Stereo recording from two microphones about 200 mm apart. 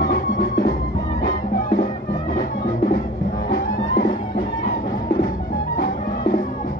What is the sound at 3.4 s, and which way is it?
Music, 45° left (ahead or behind).